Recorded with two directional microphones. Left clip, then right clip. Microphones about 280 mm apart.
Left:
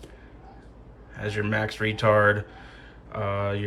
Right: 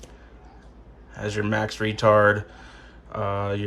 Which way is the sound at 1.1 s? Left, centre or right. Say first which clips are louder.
Right 2 dB; centre.